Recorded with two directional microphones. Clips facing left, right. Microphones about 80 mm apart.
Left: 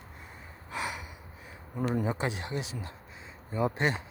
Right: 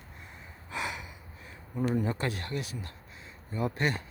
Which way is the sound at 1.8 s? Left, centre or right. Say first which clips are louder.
Even; centre.